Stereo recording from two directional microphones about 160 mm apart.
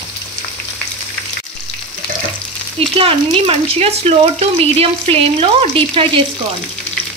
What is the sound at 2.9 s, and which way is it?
Speech, 35° right (ahead or behind).